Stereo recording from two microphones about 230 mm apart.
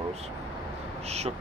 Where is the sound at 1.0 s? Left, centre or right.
Right.